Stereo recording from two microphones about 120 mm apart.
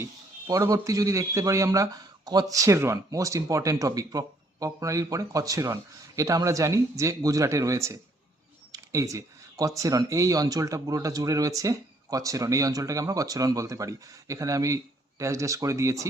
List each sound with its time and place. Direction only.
0.0 s speech: 25° right (ahead or behind)